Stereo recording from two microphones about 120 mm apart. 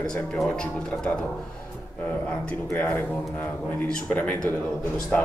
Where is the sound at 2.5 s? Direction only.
10° left (ahead or behind).